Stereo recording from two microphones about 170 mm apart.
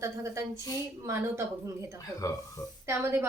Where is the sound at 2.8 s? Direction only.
15° right (ahead or behind).